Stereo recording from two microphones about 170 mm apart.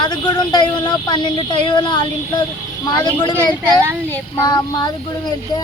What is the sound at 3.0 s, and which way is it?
Speech, 25° left (ahead or behind).